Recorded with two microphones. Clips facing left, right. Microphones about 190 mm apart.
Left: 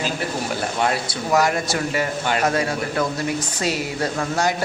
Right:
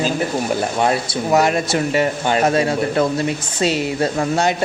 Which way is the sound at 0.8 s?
25° right (ahead or behind).